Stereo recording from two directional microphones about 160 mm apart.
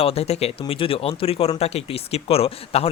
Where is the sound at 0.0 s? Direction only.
40° left (ahead or behind).